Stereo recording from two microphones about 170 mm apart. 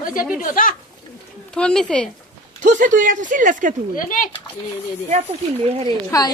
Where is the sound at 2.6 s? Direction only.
50° right (ahead or behind).